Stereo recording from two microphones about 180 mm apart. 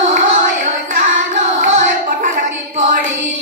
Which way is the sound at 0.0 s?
45° right (ahead or behind).